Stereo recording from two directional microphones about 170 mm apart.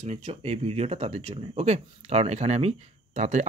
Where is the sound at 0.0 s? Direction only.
40° right (ahead or behind).